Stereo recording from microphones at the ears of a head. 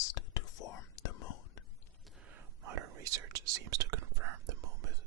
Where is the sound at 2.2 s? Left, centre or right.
Right.